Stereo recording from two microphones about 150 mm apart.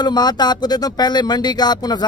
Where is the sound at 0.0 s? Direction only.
30° left (ahead or behind).